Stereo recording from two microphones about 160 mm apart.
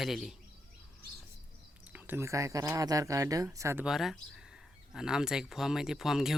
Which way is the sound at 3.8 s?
Centre (ahead or behind).